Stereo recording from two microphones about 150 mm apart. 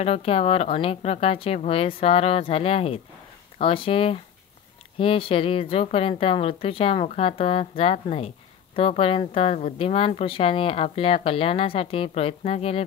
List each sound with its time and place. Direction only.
0.0 s a woman's voice: 40° left (ahead or behind)